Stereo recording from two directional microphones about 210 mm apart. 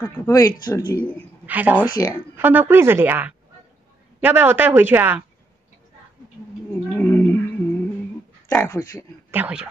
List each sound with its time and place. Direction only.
0.3 s speech: 15° left (ahead or behind)
1.4 s speech: 5° right (ahead or behind)
1.8 s speech: 15° left (ahead or behind)
2.3 s a woman's voice: 10° right (ahead or behind)
7.0 s a sound: 10° left (ahead or behind)
8.6 s speech: 15° left (ahead or behind)
9.3 s a woman's voice: 5° right (ahead or behind)